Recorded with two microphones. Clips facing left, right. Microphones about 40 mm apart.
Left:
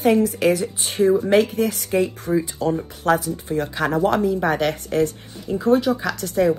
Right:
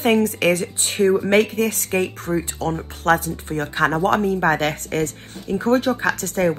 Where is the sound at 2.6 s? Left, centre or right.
Right.